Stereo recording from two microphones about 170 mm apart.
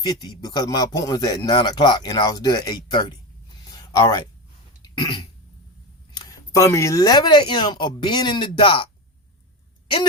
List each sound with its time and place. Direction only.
0.0 s speech: 25° left (ahead or behind)
4.8 s cough: 25° left (ahead or behind)
6.1 s speech: 20° left (ahead or behind)